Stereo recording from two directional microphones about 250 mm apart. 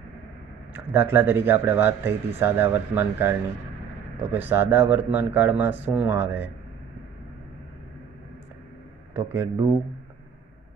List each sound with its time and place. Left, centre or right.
0.7 s speech: centre
9.1 s speech: centre